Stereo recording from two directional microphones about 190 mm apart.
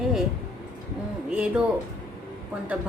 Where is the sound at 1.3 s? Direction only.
5° right (ahead or behind).